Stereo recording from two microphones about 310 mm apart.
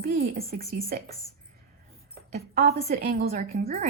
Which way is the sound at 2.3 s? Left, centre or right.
Right.